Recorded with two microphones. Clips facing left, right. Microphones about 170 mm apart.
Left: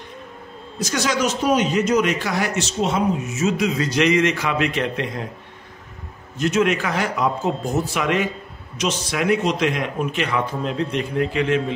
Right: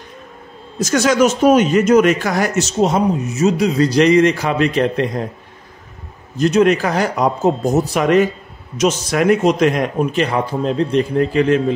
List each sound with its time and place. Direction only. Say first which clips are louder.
0.7 s speech: right 8 dB; 45° right (ahead or behind)
6.3 s speech: right 6 dB; 35° right (ahead or behind)